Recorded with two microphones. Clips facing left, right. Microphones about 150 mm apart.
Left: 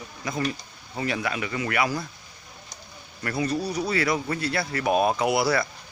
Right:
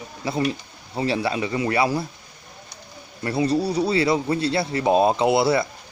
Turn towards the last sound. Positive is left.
turn(degrees=-25)  # may be behind; listen again after turning